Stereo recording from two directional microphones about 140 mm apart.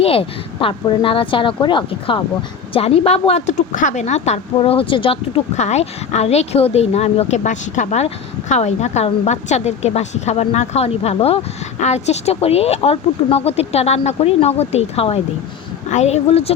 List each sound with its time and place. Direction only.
0.0 s speech: 40° left (ahead or behind)
5.5 s speech: 55° left (ahead or behind)